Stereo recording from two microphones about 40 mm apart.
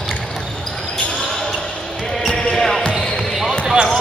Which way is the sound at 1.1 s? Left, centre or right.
Centre.